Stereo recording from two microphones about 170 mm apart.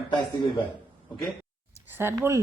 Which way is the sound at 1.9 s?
15° right (ahead or behind).